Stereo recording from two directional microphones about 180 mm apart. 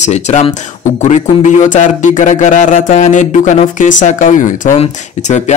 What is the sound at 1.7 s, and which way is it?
Speech, 45° left (ahead or behind).